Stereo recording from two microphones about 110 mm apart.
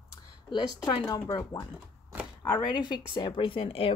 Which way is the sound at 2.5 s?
40° left (ahead or behind).